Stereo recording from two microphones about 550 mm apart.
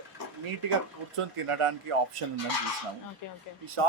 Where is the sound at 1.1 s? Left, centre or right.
Right.